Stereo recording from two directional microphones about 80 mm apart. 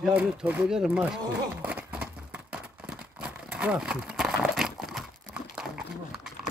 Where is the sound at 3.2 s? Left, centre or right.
Centre.